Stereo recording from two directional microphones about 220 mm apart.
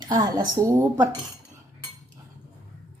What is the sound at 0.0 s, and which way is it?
Speech, 15° right (ahead or behind).